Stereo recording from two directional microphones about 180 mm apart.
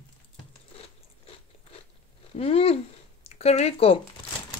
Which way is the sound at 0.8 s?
35° left (ahead or behind).